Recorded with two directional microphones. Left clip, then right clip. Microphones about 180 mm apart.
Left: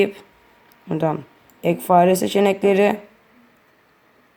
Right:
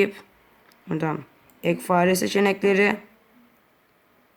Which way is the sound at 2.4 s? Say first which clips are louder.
Left 3 dB; 10° right (ahead or behind).